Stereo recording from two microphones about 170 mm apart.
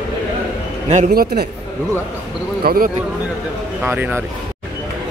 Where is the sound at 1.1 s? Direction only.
65° right (ahead or behind).